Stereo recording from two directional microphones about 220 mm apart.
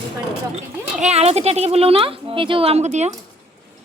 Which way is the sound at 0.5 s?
30° right (ahead or behind).